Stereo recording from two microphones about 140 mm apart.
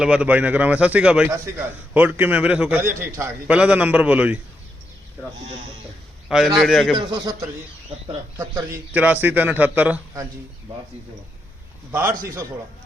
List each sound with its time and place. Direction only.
0.0 s a man's voice: 5° right (ahead or behind)
6.2 s a man's voice: centre (ahead or behind)
6.9 s a man's voice: 35° right (ahead or behind)
8.4 s a man's voice: 25° right (ahead or behind)
8.9 s a man's voice: 10° right (ahead or behind)
11.9 s a man's voice: 20° right (ahead or behind)